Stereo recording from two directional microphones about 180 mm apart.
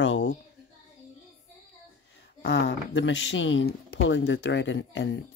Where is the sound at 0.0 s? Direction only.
90° left.